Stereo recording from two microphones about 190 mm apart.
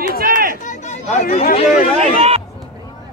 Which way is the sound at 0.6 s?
40° left (ahead or behind).